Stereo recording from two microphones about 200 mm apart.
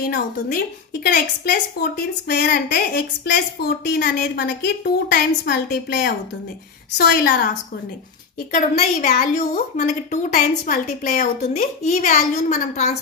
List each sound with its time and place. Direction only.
0.0 s a woman's voice: 45° left (ahead or behind)
1.8 s a woman's voice: 50° left (ahead or behind)
8.5 s a woman's voice: 40° left (ahead or behind)